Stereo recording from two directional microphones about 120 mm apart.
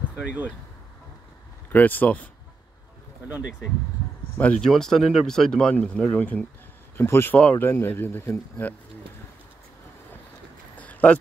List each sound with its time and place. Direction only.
0.1 s speech: 10° right (ahead or behind)
1.7 s speech: 15° left (ahead or behind)
4.4 s speech: 10° left (ahead or behind)
10.8 s a sound: 10° left (ahead or behind)